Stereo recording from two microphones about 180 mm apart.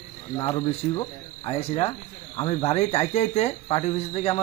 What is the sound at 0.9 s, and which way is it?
Frog, 30° left (ahead or behind).